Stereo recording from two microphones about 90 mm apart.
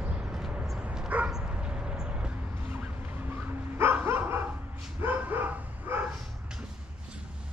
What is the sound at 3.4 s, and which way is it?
Dog, 25° right (ahead or behind).